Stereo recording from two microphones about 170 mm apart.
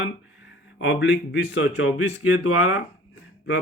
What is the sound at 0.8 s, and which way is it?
Speech, 90° left.